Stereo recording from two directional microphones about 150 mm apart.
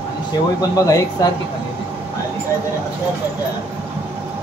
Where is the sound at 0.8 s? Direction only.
20° left (ahead or behind).